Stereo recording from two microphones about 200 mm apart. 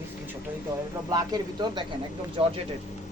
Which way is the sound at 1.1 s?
20° right (ahead or behind).